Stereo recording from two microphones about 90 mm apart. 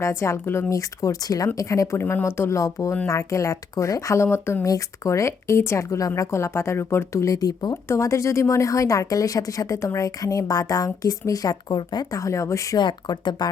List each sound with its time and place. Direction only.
0.0 s a woman's voice: 30° left (ahead or behind)
4.6 s a woman's voice: 40° left (ahead or behind)
7.9 s a woman's voice: 35° left (ahead or behind)
12.7 s speech: 55° left (ahead or behind)